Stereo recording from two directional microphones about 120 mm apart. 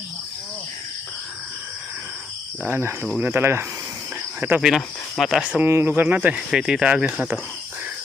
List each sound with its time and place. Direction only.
2.6 s speech: 20° right (ahead or behind)
4.6 s speech: 5° right (ahead or behind)